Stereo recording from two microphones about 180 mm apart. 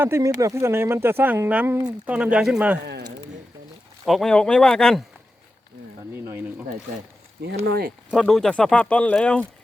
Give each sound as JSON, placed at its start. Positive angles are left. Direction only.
{"t": 0.0, "sound": "speech", "side_deg": -15}
{"t": 2.8, "sound": "speech", "side_deg": -70}
{"t": 4.0, "sound": "speech", "side_deg": 0}
{"t": 6.1, "sound": "speech", "side_deg": -15}
{"t": 7.4, "sound": "speech", "side_deg": -55}
{"t": 8.1, "sound": "speech", "side_deg": 0}